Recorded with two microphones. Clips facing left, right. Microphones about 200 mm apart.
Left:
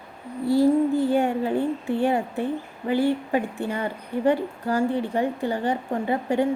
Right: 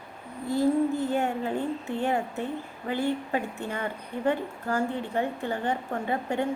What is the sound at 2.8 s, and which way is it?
A woman's voice, 25° left (ahead or behind).